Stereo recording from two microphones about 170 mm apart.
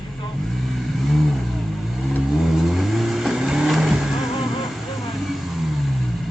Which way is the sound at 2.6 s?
Centre (ahead or behind).